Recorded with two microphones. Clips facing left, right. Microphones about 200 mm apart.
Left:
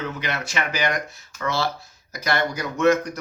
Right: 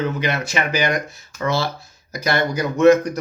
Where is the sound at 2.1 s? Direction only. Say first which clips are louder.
Right 3 dB; 10° right (ahead or behind).